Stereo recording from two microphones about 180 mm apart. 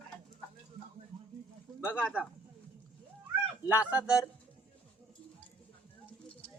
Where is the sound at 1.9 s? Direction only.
5° right (ahead or behind).